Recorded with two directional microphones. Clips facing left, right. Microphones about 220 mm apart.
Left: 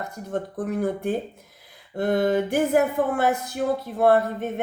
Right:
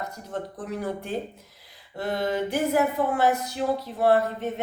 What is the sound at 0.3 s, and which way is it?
Speech, 55° left (ahead or behind).